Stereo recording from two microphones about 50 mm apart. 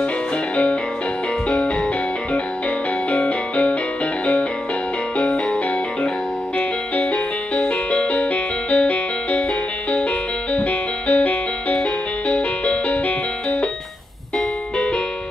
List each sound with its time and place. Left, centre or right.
3.1 s music: left
5.2 s music: left
7.0 s music: left
10.5 s music: left